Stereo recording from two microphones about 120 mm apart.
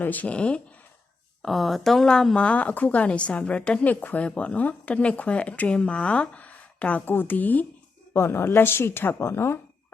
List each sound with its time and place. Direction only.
0.0 s a woman's voice: 15° left (ahead or behind)